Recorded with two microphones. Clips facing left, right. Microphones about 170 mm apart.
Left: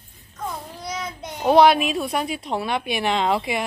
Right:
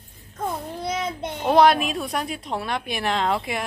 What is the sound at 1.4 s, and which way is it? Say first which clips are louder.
A woman's voice: left 2 dB; centre (ahead or behind).